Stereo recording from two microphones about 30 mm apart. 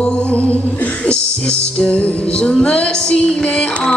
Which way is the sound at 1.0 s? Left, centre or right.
Left.